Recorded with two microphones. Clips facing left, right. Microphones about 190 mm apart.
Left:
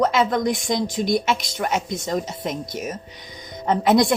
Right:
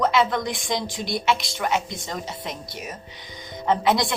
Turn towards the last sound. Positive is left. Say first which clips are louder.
# left 4 dB
turn(degrees=45)  # may be behind; listen again after turning